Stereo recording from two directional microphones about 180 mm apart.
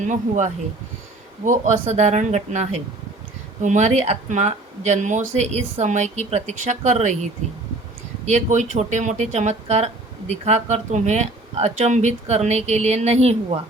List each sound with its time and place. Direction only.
0.0 s speech: 40° right (ahead or behind)